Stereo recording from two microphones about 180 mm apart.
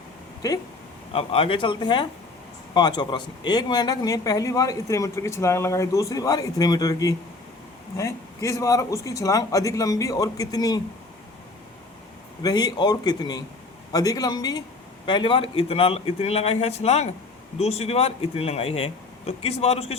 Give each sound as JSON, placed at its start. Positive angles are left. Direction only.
{"t": 0.4, "sound": "speech", "side_deg": 20}
{"t": 1.1, "sound": "a man's voice", "side_deg": 30}
{"t": 12.4, "sound": "a man's voice", "side_deg": 20}